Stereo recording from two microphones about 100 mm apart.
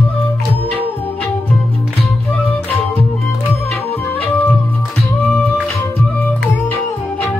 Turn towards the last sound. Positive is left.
turn(degrees=15)  # may be behind; listen again after turning